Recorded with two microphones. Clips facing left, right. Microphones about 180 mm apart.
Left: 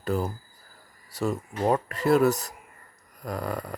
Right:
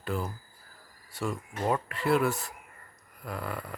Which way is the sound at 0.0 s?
40° left (ahead or behind).